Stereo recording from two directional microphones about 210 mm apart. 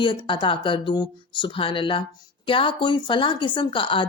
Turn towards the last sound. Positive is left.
turn(degrees=25)  # may be behind; listen again after turning